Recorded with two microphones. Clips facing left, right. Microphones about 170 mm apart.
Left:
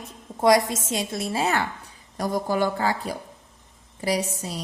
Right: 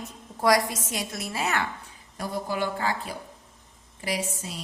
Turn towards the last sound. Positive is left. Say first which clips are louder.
# left 5 dB
turn(degrees=40)  # may be behind; listen again after turning